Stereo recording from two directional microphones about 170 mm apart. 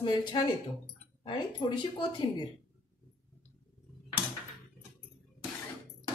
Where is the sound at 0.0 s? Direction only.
25° left (ahead or behind).